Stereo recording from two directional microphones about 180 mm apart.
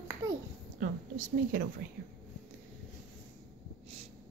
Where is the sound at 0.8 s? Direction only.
45° right (ahead or behind).